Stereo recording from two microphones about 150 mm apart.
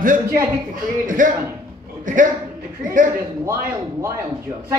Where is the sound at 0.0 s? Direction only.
65° right (ahead or behind).